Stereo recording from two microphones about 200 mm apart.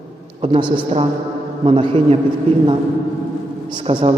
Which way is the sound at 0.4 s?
25° right (ahead or behind).